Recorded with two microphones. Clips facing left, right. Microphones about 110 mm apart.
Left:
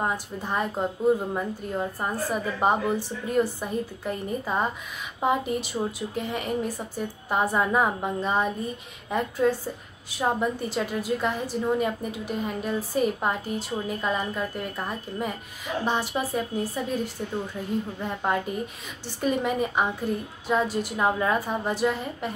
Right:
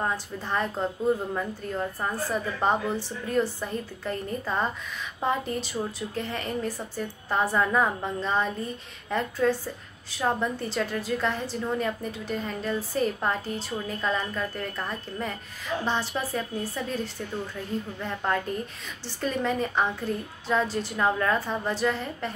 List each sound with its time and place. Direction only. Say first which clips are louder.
0.0 s a woman's voice: left 1 dB; 10° left (ahead or behind)